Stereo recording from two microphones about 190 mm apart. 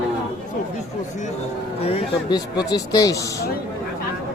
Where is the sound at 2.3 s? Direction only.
20° left (ahead or behind).